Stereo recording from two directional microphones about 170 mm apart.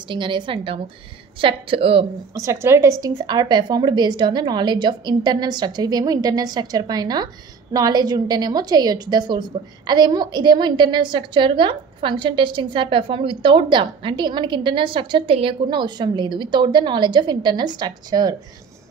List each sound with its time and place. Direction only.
0.1 s a woman's voice: 30° right (ahead or behind)
2.3 s a woman's voice: 15° right (ahead or behind)